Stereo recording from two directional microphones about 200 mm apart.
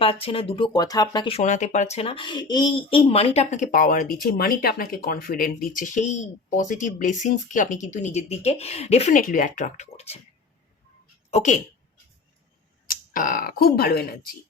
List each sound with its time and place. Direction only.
0.0 s speech: 25° left (ahead or behind)
1.4 s speech: 35° left (ahead or behind)
11.3 s speech: 35° left (ahead or behind)
12.9 s speech: 45° left (ahead or behind)